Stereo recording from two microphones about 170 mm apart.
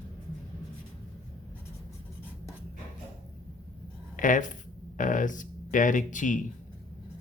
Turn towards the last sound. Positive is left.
turn(degrees=50)  # may be behind; listen again after turning